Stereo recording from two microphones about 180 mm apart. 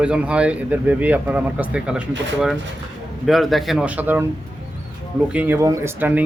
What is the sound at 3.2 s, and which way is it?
A man's voice, centre (ahead or behind).